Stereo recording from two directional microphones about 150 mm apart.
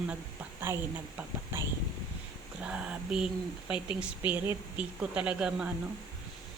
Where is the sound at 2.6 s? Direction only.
5° right (ahead or behind).